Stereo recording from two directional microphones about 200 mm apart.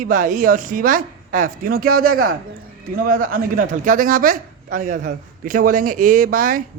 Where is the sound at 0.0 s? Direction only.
40° right (ahead or behind).